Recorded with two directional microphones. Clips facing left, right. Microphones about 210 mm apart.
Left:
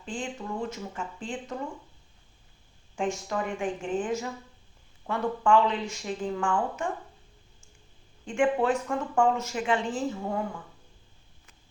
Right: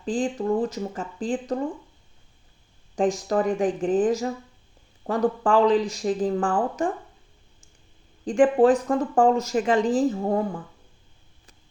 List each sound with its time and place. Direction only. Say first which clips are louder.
0.0 s speech: right 10 dB; 35° right (ahead or behind)
2.9 s speech: right 8 dB; 35° right (ahead or behind)
8.2 s speech: right 8 dB; 35° right (ahead or behind)